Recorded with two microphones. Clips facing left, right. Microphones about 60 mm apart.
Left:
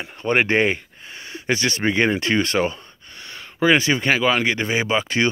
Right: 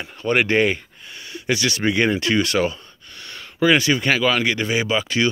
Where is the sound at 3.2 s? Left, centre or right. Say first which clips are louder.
Even; centre.